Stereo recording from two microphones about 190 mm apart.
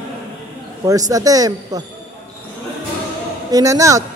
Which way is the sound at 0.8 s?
20° right (ahead or behind).